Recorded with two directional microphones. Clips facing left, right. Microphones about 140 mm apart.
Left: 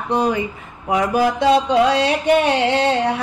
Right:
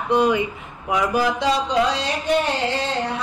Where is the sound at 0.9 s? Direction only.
55° left (ahead or behind).